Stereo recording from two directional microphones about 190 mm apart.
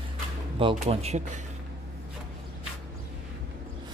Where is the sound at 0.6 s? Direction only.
30° right (ahead or behind).